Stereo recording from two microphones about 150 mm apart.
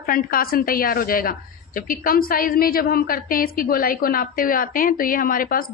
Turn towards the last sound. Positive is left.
turn(degrees=70)  # may be behind; listen again after turning